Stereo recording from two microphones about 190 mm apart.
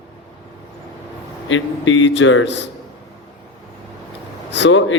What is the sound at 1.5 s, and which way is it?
A man's voice, 85° left.